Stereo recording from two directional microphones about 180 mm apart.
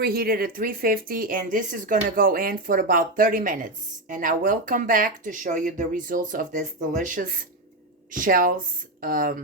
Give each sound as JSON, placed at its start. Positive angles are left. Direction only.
{"t": 0.0, "sound": "speech", "side_deg": -60}